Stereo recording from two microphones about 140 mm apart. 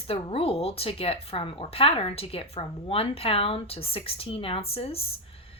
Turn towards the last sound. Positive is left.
turn(degrees=45)  # may be behind; listen again after turning